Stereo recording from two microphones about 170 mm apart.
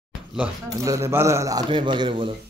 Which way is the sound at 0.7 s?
20° right (ahead or behind).